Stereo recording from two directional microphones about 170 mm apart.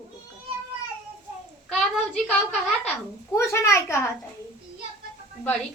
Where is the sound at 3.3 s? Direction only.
15° left (ahead or behind).